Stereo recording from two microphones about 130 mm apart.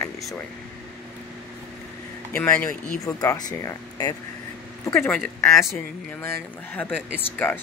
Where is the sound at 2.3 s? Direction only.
10° left (ahead or behind).